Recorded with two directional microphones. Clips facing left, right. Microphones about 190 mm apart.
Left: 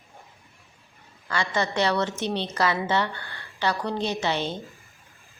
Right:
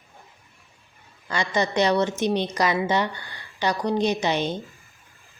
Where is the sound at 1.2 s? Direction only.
20° right (ahead or behind).